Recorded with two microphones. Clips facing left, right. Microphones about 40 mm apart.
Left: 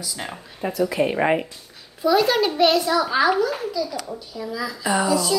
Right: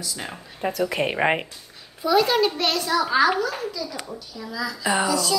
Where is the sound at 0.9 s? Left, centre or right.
Right.